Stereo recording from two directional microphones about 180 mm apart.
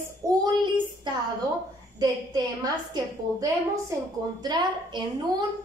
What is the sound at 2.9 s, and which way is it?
A woman's voice, 20° right (ahead or behind).